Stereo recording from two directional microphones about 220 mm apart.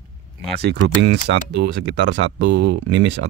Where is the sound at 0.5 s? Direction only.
50° right (ahead or behind).